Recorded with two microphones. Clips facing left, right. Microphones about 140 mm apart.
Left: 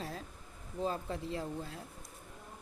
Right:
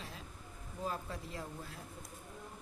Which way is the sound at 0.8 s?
30° left (ahead or behind).